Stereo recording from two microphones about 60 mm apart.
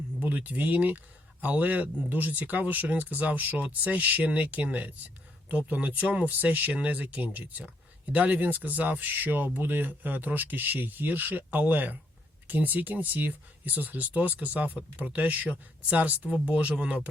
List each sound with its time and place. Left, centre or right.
0.2 s speech: right